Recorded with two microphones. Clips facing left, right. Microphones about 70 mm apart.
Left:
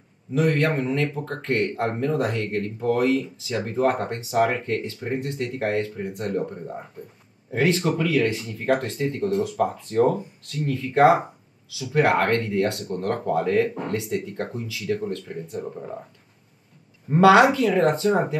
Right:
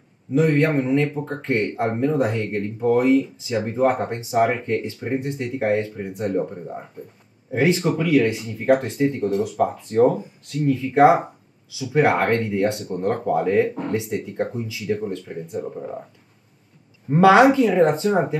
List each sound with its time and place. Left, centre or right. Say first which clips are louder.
0.7 s speech: right 4 dB; centre
15.6 s speech: right 3 dB; centre
17.1 s speech: right 2 dB; centre